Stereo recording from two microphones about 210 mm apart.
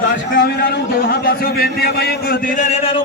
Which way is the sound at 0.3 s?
50° left (ahead or behind).